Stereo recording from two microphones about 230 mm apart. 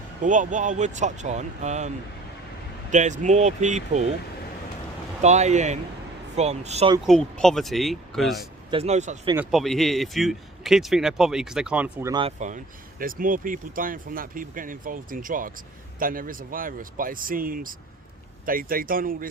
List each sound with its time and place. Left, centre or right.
0.2 s speech: right
2.9 s speech: right
5.2 s speech: right
7.0 s speech: centre
8.7 s speech: right
9.3 s speech: centre
12.4 s speech: right